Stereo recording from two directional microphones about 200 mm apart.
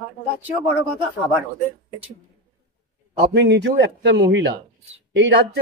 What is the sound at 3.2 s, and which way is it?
Speech, 55° right (ahead or behind).